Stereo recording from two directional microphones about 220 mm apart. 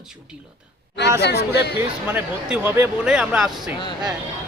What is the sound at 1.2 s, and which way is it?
Speech, 50° left (ahead or behind).